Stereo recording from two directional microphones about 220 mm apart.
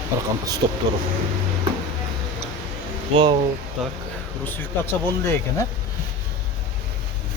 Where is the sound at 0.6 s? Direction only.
20° right (ahead or behind).